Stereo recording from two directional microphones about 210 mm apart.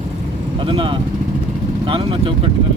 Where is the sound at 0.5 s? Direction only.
25° right (ahead or behind).